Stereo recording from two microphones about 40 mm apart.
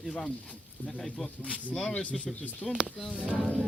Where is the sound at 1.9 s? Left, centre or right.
Left.